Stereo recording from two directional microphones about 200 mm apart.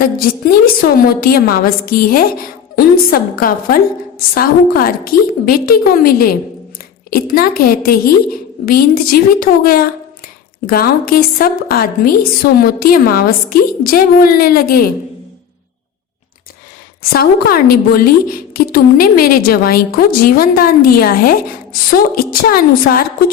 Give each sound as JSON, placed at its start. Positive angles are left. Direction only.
{"t": 0.2, "sound": "a woman's voice", "side_deg": 45}
{"t": 17.0, "sound": "a woman's voice", "side_deg": 50}